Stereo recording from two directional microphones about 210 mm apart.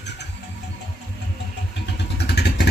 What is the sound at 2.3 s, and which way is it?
Vehicle, 50° left (ahead or behind).